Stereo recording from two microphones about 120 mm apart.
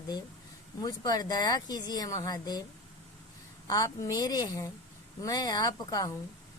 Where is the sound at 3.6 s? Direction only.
30° left (ahead or behind).